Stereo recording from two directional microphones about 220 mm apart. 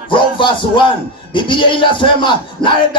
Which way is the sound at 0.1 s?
20° left (ahead or behind).